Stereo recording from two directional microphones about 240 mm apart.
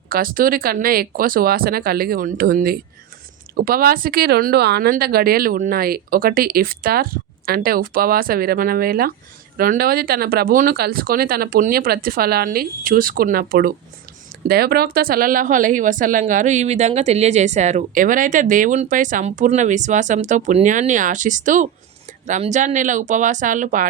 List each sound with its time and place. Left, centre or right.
0.1 s a woman's voice: right